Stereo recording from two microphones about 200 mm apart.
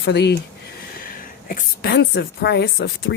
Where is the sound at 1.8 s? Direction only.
60° left (ahead or behind).